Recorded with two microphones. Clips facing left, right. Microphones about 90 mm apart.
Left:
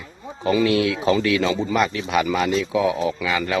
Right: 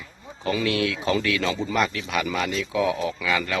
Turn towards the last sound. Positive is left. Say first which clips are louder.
# left 3 dB
turn(degrees=20)  # may be behind; listen again after turning